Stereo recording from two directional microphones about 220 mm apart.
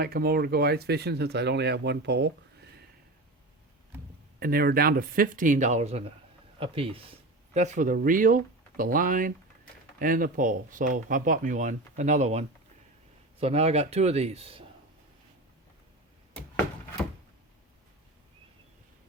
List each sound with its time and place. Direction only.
0.0 s speech: 45° right (ahead or behind)
4.4 s speech: 45° right (ahead or behind); by 14.6 s 25° right (ahead or behind)